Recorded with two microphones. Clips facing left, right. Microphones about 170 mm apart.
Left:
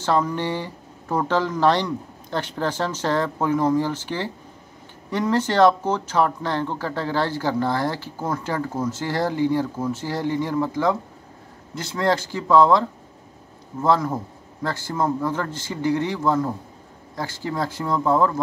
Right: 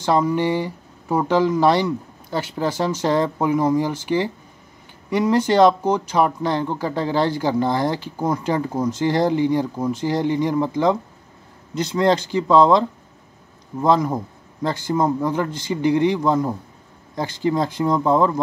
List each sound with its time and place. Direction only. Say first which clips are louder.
0.0 s speech: right 3 dB; 15° right (ahead or behind)